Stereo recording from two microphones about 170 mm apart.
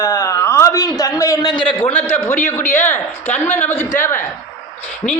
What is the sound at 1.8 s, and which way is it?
Speech, 10° left (ahead or behind).